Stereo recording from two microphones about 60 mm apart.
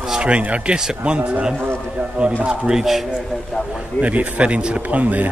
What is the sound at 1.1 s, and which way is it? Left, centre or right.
Speech, centre.